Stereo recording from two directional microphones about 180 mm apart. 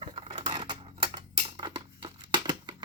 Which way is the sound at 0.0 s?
30° right (ahead or behind).